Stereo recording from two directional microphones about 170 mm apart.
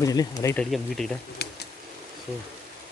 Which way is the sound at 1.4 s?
75° left (ahead or behind).